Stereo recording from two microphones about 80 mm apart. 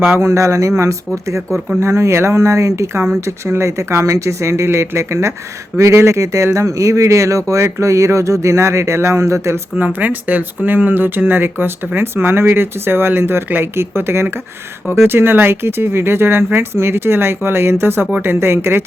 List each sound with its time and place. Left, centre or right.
0.1 s speech: right
1.8 s speech: right
9.7 s speech: right